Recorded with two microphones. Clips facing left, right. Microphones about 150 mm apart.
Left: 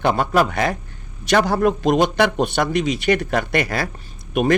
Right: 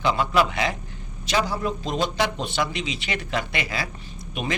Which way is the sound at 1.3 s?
65° left (ahead or behind).